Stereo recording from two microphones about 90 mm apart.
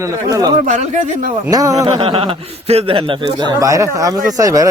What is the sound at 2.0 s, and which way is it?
A man's voice, 80° right.